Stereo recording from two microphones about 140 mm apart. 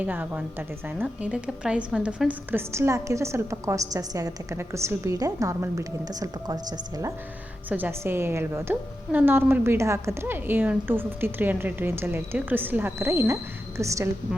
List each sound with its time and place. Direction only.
0.0 s a woman's voice: 10° right (ahead or behind)
7.7 s a woman's voice: 15° right (ahead or behind)